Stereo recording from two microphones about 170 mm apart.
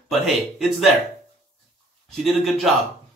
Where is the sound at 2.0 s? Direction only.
Centre (ahead or behind).